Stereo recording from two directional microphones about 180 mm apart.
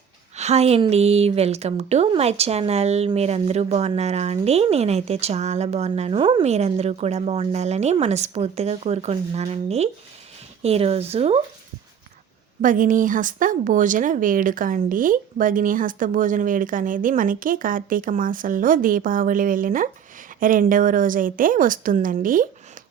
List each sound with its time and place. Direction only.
0.3 s a woman's voice: 40° right (ahead or behind)
12.6 s speech: 50° right (ahead or behind)